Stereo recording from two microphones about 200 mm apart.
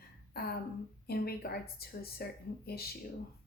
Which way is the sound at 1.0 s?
50° left (ahead or behind).